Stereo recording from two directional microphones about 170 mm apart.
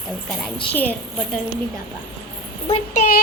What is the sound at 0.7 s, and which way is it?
Speech, 10° left (ahead or behind).